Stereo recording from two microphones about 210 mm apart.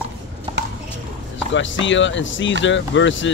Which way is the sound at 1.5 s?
60° left (ahead or behind).